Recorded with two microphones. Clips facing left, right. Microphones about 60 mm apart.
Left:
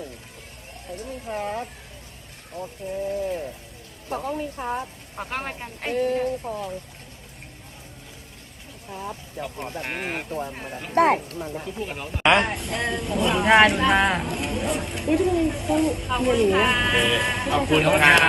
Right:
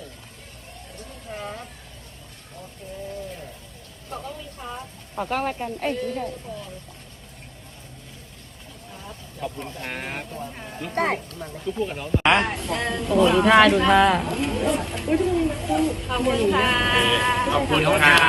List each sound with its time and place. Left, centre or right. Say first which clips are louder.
1.3 s speech: left 5 dB; left
4.1 s speech: left 7 dB; left
5.2 s speech: right 6 dB; left
5.9 s speech: left 4 dB; left
9.4 s speech: right 2 dB; left
9.8 s speech: left 1 dB; centre
10.9 s speech: left 6 dB; left
11.8 s speech: right 6 dB; centre
12.2 s speech: left 2 dB; centre